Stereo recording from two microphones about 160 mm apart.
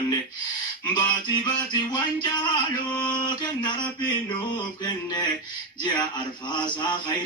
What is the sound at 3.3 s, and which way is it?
Music, 25° left (ahead or behind).